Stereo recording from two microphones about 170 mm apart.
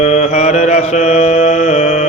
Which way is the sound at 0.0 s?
45° left (ahead or behind).